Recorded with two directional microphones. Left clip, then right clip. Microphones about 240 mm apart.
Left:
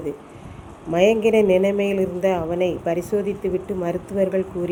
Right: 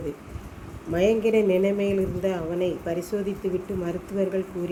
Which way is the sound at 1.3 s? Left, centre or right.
Centre.